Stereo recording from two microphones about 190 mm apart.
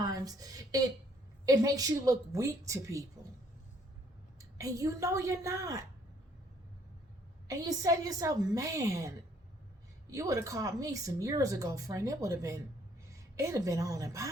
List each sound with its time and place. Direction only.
0.0 s a sound: 20° right (ahead or behind)
1.5 s speech: 20° right (ahead or behind)
4.4 s a woman's voice: 20° right (ahead or behind)
7.4 s speech: 15° right (ahead or behind)